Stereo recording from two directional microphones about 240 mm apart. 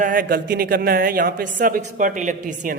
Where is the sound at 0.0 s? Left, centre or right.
Right.